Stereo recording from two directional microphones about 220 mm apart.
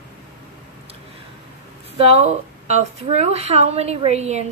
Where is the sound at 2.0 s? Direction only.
25° right (ahead or behind).